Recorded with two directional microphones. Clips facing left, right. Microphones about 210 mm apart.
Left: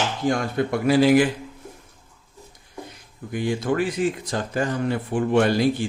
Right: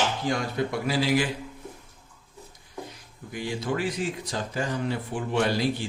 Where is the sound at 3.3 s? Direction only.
55° left (ahead or behind).